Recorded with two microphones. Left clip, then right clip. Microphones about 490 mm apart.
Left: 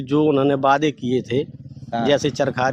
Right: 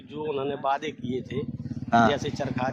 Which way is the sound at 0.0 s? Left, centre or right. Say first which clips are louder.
Left 13 dB; left.